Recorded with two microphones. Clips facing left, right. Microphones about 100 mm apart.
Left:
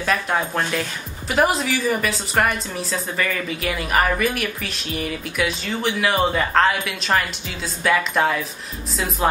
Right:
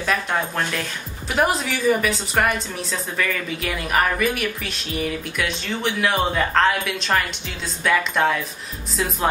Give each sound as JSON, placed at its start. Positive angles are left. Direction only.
{"t": 0.0, "sound": "a woman's voice", "side_deg": 0}